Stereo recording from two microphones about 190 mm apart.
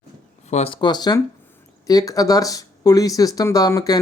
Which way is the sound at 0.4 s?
35° left (ahead or behind).